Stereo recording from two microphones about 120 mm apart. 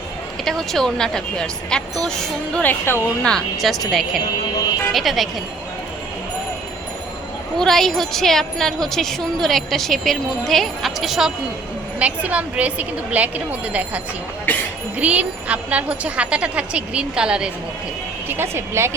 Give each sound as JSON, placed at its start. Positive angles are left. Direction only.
{"t": 0.4, "sound": "speech", "side_deg": 5}
{"t": 3.2, "sound": "speech", "side_deg": 5}
{"t": 4.9, "sound": "speech", "side_deg": 0}
{"t": 7.6, "sound": "speech", "side_deg": 5}
{"t": 14.5, "sound": "a sound", "side_deg": 15}
{"t": 14.9, "sound": "speech", "side_deg": -10}
{"t": 18.3, "sound": "speech", "side_deg": -20}